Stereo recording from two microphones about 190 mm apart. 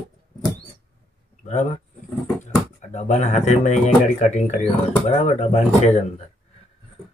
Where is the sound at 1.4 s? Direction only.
40° left (ahead or behind).